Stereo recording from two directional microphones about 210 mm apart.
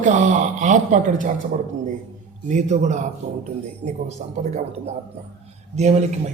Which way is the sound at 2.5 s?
35° right (ahead or behind).